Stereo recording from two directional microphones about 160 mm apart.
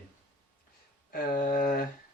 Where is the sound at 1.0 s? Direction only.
60° left (ahead or behind).